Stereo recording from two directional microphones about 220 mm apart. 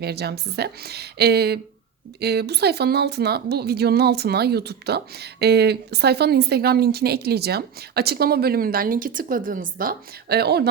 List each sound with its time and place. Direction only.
0.0 s speech: 45° right (ahead or behind)